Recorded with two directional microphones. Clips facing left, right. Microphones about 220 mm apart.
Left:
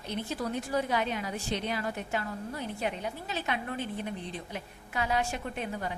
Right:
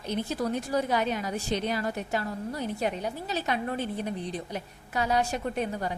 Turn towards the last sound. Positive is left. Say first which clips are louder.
# right 5 dB
turn(degrees=-40)  # may be behind; listen again after turning